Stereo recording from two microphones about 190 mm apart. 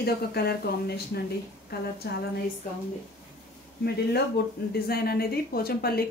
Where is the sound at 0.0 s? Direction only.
55° left (ahead or behind).